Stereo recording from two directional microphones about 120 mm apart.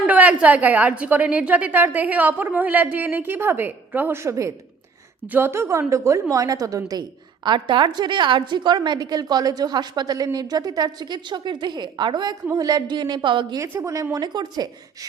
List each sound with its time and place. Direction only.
0.0 s a woman's voice: 15° right (ahead or behind); by 7.0 s 30° right (ahead or behind)
7.4 s a woman's voice: 40° right (ahead or behind)
13.6 s a woman's voice: 25° right (ahead or behind)